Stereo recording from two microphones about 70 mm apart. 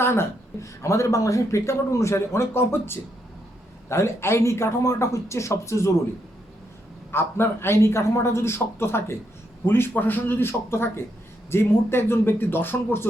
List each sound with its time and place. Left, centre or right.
0.0 s speech: left
7.1 s speech: left